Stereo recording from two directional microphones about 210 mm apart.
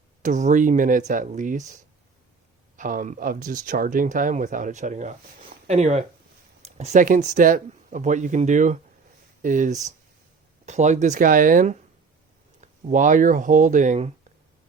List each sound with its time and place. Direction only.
0.2 s speech: 35° right (ahead or behind)